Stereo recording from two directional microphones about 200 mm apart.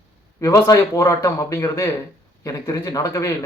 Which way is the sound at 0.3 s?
15° left (ahead or behind).